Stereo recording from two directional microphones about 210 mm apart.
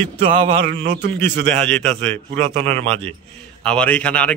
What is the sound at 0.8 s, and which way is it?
Speech, 55° right (ahead or behind).